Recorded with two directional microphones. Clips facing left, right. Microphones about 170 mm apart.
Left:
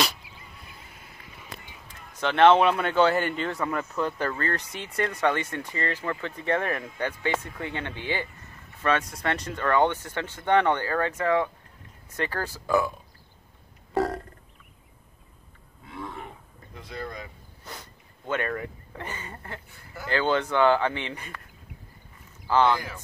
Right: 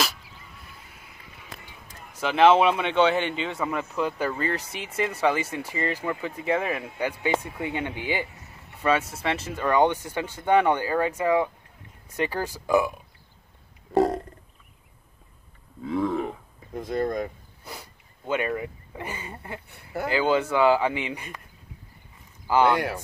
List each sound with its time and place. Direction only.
2.1 s speech: 5° right (ahead or behind)
13.9 s burping: 20° right (ahead or behind)
16.7 s speech: 50° right (ahead or behind)
17.6 s speech: 10° right (ahead or behind)
19.7 s speech: 65° right (ahead or behind)
20.1 s speech: 10° right (ahead or behind)
22.5 s speech: 10° right (ahead or behind)